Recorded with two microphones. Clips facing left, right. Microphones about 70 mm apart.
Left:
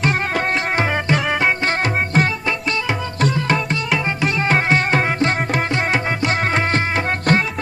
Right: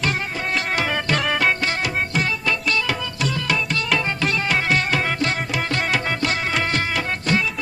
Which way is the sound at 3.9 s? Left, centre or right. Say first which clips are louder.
Left 1 dB; centre.